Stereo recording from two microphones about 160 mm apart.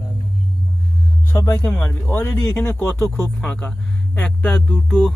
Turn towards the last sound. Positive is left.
turn(degrees=0)  # may be behind; listen again after turning